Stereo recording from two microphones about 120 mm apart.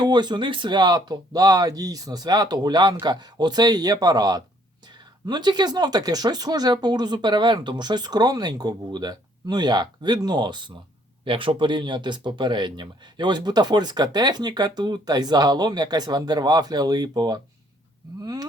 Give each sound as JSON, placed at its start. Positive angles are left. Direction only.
{"t": 0.0, "sound": "speech", "side_deg": -35}